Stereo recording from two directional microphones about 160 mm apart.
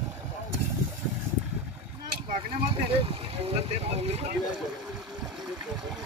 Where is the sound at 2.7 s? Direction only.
35° right (ahead or behind).